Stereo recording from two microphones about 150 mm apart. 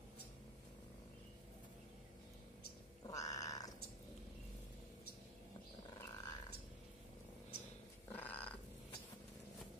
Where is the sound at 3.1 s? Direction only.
25° left (ahead or behind).